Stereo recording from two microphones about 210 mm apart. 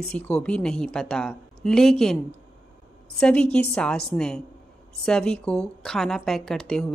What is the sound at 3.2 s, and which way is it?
Speech, 5° left (ahead or behind).